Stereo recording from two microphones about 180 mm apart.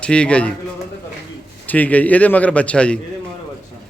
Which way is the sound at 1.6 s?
10° left (ahead or behind).